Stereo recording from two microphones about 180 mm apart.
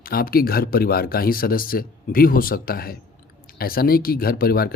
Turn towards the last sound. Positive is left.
turn(degrees=55)  # may be behind; listen again after turning